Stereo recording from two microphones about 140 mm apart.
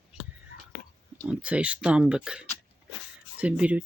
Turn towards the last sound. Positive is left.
turn(degrees=-10)  # may be behind; listen again after turning